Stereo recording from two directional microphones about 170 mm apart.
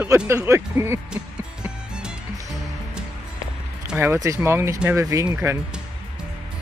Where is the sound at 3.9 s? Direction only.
15° right (ahead or behind).